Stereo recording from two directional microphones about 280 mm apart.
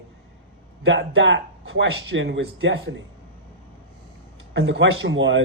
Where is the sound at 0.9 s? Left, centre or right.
Right.